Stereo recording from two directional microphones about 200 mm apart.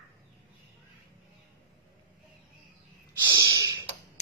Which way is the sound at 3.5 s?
15° right (ahead or behind).